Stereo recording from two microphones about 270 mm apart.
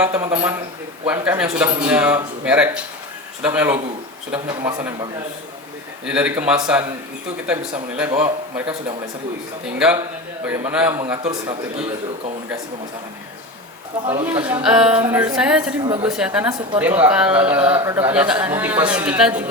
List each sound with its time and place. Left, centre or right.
0.0 s a man's voice: centre
6.1 s a man's voice: centre
9.6 s a man's voice: centre
11.2 s a man's voice: centre
14.3 s a man's voice: centre
15.8 s a man's voice: centre
16.0 s a man's voice: centre